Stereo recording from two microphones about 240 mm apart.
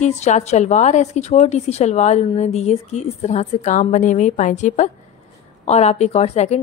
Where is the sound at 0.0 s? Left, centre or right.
Left.